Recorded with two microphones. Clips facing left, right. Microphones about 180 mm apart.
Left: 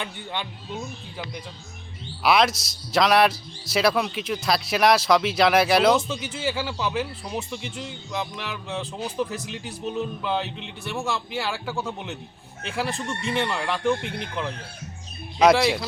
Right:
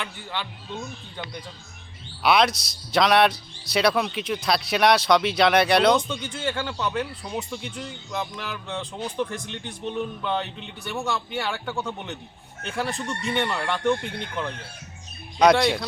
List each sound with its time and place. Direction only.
0.0 s speech: 20° left (ahead or behind)
0.7 s a man's voice: 5° left (ahead or behind)